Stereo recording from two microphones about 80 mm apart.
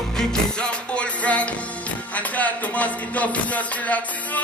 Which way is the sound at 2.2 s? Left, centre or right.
Centre.